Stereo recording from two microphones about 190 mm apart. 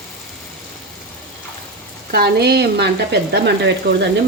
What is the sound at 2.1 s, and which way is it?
Speech, 55° right (ahead or behind).